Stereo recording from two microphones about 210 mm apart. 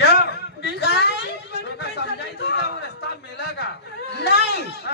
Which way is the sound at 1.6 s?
55° left (ahead or behind).